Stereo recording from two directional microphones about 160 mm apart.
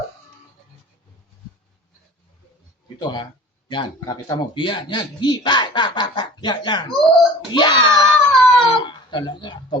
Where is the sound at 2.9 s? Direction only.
30° left (ahead or behind).